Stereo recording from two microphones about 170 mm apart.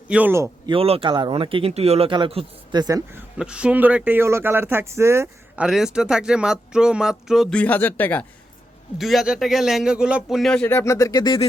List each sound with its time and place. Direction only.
0.1 s speech: 10° right (ahead or behind)
0.7 s speech: 35° right (ahead or behind)
3.3 s speech: 5° right (ahead or behind)
5.6 s speech: 5° right (ahead or behind)
7.5 s speech: 10° left (ahead or behind)
9.0 s speech: centre (ahead or behind); by 11.3 s 25° left (ahead or behind)